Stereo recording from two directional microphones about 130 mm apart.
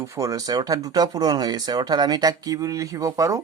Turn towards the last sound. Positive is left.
turn(degrees=-25)  # may be behind; listen again after turning